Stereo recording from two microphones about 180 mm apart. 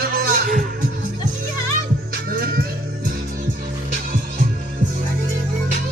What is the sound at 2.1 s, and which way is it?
Music, 55° right (ahead or behind).